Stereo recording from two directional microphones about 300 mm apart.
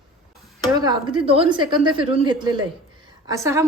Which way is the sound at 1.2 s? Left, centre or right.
Centre.